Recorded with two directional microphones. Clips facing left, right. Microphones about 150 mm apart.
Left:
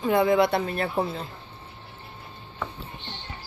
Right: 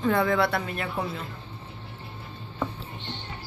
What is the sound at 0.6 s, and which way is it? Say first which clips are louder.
Speech: left 4 dB; 35° left (ahead or behind).